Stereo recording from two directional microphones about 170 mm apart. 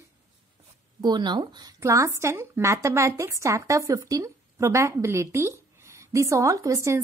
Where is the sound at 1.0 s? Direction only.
25° right (ahead or behind).